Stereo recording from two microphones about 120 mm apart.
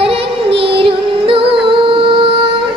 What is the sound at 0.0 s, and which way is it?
Music, 50° right (ahead or behind).